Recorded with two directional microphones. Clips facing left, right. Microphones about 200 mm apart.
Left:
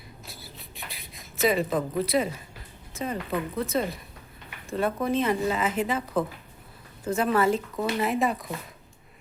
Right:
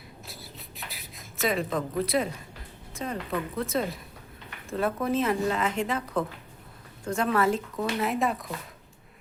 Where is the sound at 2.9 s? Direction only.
Centre (ahead or behind).